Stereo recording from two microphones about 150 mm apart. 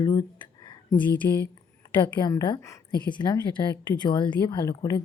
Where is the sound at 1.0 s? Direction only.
10° left (ahead or behind).